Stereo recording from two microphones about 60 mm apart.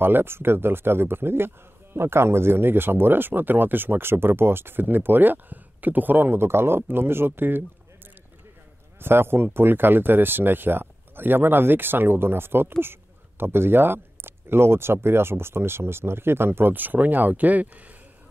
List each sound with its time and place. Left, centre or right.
0.0 s speech: right
9.0 s speech: right